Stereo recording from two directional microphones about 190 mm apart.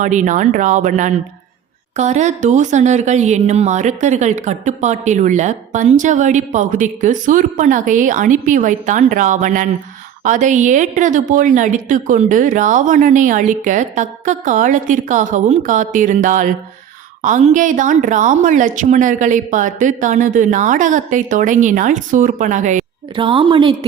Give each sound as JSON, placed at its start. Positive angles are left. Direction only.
{"t": 0.0, "sound": "a woman's voice", "side_deg": -40}
{"t": 23.1, "sound": "a woman's voice", "side_deg": -25}